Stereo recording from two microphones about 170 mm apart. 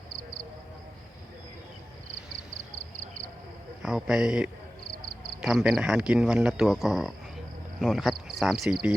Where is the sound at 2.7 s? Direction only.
50° right (ahead or behind).